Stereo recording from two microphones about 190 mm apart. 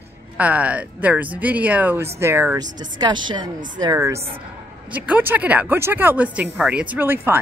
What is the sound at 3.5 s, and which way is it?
Speech, 45° right (ahead or behind).